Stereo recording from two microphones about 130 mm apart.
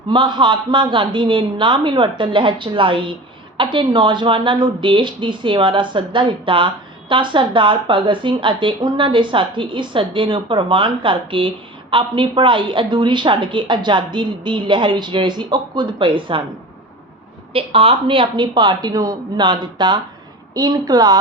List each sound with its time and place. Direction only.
0.1 s speech: 35° right (ahead or behind)
17.5 s speech: 45° right (ahead or behind)